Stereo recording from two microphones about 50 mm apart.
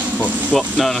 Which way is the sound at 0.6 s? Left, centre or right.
Centre.